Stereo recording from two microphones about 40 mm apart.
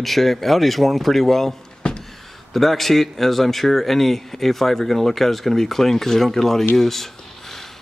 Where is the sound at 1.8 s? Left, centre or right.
Left.